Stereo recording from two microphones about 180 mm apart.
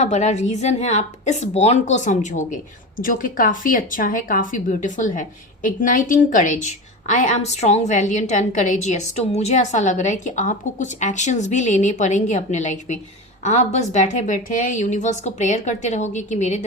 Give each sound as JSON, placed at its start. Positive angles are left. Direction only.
{"t": 0.0, "sound": "a woman's voice", "side_deg": 40}